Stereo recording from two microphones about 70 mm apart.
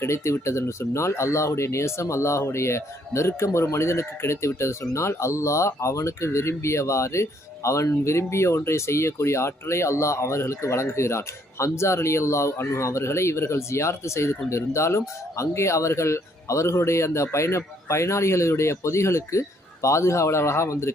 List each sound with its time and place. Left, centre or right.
0.0 s speech: left